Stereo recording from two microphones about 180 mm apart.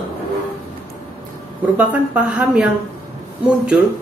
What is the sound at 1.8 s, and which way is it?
Speech, 10° right (ahead or behind).